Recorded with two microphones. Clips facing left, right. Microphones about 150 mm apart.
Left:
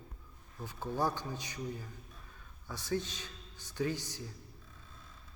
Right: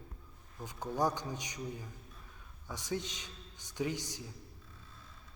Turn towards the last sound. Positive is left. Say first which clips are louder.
# left 1 dB
turn(degrees=-15)  # may be behind; listen again after turning